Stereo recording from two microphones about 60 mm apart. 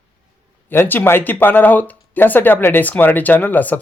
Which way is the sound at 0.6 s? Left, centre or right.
Left.